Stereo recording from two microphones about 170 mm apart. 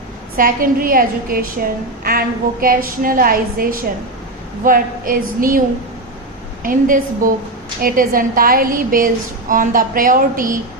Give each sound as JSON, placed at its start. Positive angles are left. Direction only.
{"t": 0.3, "sound": "a woman's voice", "side_deg": -55}